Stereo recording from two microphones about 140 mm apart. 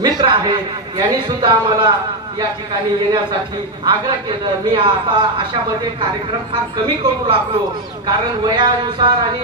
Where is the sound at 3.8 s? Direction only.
35° right (ahead or behind).